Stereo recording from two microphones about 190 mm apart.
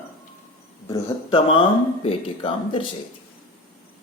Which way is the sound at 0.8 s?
20° left (ahead or behind).